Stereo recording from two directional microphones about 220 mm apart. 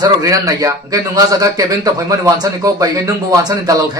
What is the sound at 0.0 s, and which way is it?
Speech, 15° right (ahead or behind).